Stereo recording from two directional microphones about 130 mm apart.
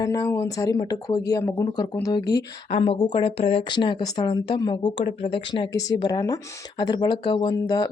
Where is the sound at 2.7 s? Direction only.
45° left (ahead or behind).